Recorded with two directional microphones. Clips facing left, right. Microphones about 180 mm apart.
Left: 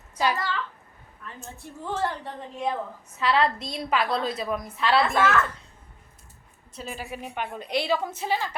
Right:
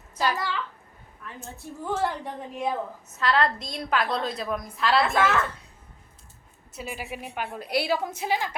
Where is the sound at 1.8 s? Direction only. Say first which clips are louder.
Right 1 dB; 10° right (ahead or behind).